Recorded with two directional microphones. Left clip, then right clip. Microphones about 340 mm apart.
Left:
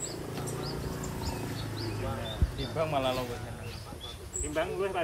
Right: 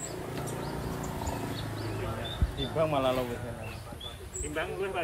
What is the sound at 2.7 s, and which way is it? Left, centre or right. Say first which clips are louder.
Speech: right 2 dB; right.